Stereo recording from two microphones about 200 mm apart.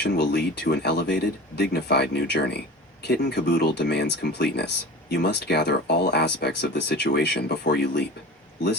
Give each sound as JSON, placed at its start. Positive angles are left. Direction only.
{"t": 0.0, "sound": "speech", "side_deg": 55}